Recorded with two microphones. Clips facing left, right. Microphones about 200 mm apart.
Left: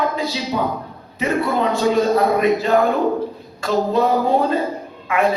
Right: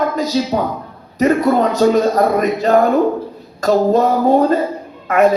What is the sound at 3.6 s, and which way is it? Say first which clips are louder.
Music: right 5 dB; 45° right (ahead or behind).